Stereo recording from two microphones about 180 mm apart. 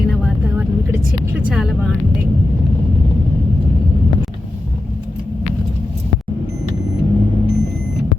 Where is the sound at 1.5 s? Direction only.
5° right (ahead or behind).